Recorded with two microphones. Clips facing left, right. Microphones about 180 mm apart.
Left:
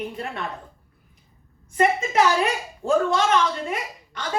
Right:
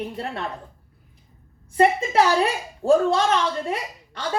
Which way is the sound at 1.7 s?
35° right (ahead or behind).